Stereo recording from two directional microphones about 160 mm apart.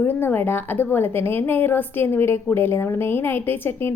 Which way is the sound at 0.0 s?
10° left (ahead or behind).